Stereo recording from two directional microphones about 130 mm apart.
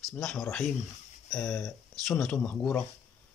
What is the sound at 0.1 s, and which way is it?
Speech, 5° left (ahead or behind).